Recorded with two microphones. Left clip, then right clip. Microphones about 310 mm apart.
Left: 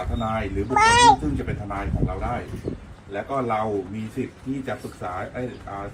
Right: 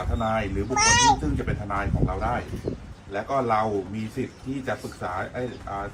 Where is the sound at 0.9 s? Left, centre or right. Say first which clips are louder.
Left 4 dB; centre.